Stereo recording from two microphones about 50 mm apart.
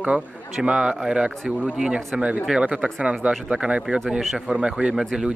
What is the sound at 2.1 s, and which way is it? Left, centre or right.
A man's voice, right.